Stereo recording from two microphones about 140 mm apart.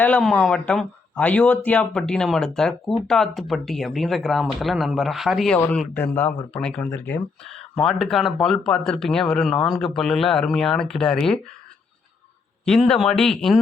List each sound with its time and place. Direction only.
0.0 s speech: 5° left (ahead or behind)
5.5 s speech: 15° left (ahead or behind)
7.9 s speech: centre (ahead or behind)
12.6 s speech: 5° left (ahead or behind)